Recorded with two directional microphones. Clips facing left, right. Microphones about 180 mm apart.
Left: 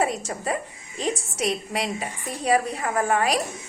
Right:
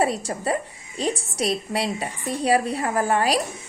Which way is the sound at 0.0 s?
30° right (ahead or behind).